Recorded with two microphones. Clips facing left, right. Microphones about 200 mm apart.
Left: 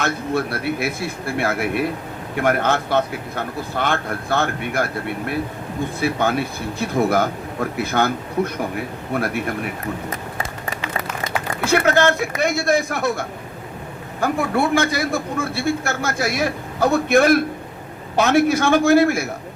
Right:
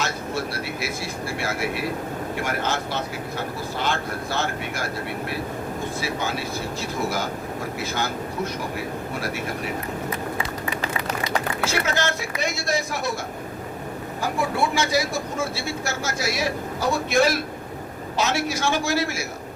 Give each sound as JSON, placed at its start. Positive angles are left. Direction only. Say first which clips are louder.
{"t": 0.0, "sound": "a man's voice", "louder": "left 5 dB", "side_deg": 55}
{"t": 11.2, "sound": "a man's voice", "louder": "left 1 dB", "side_deg": 55}